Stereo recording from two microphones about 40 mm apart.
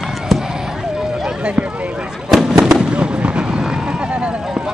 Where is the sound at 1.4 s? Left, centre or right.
Right.